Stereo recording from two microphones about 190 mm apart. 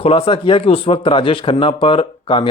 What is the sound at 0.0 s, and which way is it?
Speech, 30° left (ahead or behind).